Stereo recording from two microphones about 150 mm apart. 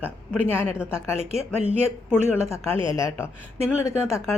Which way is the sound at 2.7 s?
35° right (ahead or behind).